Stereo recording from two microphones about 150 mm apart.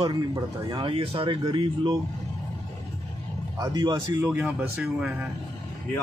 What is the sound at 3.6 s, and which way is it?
Speech, 30° right (ahead or behind).